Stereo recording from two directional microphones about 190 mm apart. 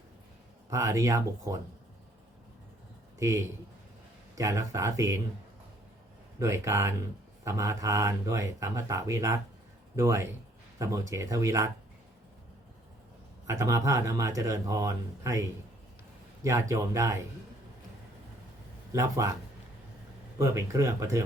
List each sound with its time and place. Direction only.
0.7 s speech: 15° right (ahead or behind)
3.2 s speech: 15° right (ahead or behind)
6.4 s speech: 15° right (ahead or behind)
13.5 s speech: 15° right (ahead or behind)
18.9 s speech: 15° right (ahead or behind)
20.4 s speech: 15° right (ahead or behind)